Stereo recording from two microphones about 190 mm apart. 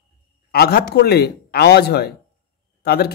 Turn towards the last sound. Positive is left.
turn(degrees=55)  # may be behind; listen again after turning